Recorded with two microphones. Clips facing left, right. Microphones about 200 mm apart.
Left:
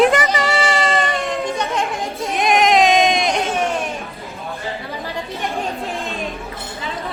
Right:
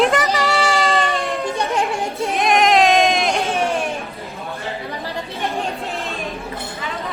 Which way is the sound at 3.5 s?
30° right (ahead or behind).